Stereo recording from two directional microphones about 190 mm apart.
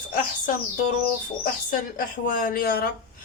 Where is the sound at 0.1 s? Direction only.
45° left (ahead or behind).